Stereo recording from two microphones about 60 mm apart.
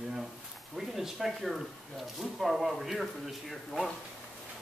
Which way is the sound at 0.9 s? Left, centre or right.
Centre.